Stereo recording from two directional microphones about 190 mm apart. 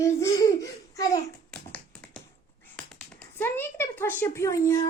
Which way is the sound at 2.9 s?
10° left (ahead or behind).